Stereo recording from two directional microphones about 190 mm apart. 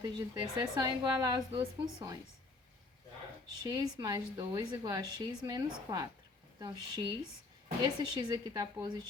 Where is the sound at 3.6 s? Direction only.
20° right (ahead or behind).